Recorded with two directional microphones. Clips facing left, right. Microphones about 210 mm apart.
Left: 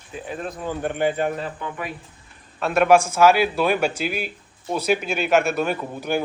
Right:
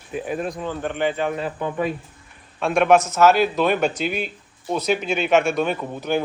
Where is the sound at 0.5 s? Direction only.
10° left (ahead or behind).